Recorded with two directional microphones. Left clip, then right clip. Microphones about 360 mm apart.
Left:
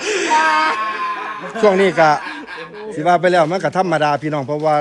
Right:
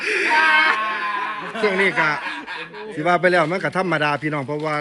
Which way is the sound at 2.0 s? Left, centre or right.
Centre.